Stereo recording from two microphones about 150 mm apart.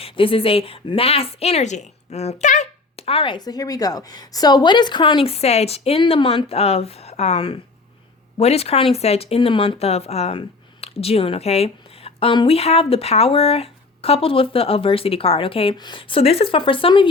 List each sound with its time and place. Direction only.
0.0 s speech: 35° left (ahead or behind); by 3.0 s 55° left (ahead or behind)
3.1 s speech: 35° left (ahead or behind)